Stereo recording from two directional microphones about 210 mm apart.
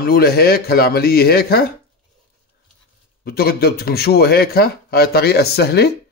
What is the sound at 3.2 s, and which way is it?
A man's voice, 45° left (ahead or behind).